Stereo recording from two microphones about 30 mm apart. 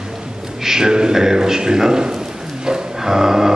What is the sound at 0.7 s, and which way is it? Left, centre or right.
A man's voice, right.